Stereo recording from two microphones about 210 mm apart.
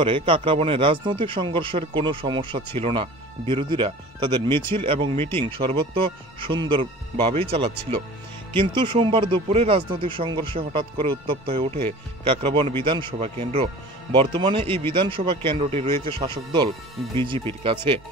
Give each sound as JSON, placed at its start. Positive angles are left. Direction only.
{"t": 0.0, "sound": "speech", "side_deg": -25}